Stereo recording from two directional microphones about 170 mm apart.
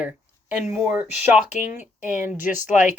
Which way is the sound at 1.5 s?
45° left (ahead or behind).